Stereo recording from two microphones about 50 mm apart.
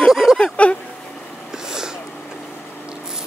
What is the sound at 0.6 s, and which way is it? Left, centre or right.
Speech, left.